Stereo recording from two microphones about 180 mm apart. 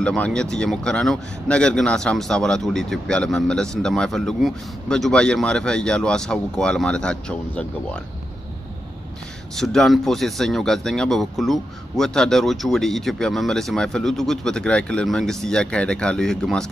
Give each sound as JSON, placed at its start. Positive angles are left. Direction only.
{"t": 0.0, "sound": "speech", "side_deg": 5}
{"t": 9.6, "sound": "speech", "side_deg": 0}